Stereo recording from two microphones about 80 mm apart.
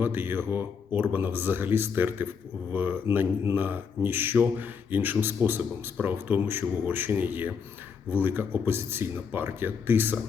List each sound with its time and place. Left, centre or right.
0.0 s speech: right